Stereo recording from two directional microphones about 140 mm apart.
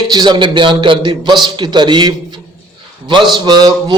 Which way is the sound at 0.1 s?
30° right (ahead or behind).